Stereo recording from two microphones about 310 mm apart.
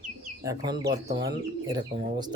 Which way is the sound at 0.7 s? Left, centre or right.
Right.